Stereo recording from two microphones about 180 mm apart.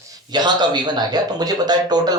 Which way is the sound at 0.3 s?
25° right (ahead or behind).